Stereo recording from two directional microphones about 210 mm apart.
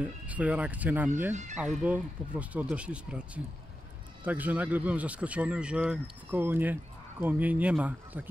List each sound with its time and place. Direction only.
0.0 s speech: 5° right (ahead or behind)
1.3 s speech: 35° right (ahead or behind)
1.6 s speech: 5° right (ahead or behind)